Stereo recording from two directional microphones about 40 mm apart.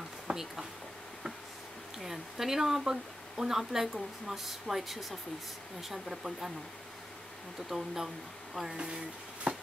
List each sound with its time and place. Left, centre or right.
0.3 s speech: centre
2.0 s speech: centre
7.7 s speech: centre
8.7 s speech: centre